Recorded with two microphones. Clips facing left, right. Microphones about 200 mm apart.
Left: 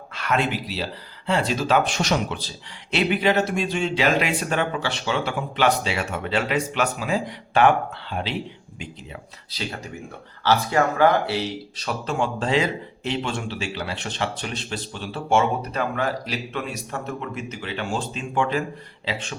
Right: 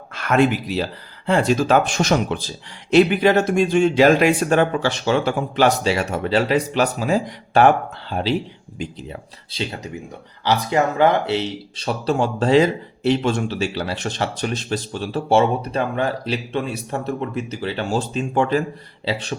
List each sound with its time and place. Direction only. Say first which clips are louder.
0.1 s a man's voice: right 7 dB; 50° right (ahead or behind)
9.5 s speech: right 4 dB; 25° right (ahead or behind)
11.8 s a man's voice: right 5 dB; 30° right (ahead or behind)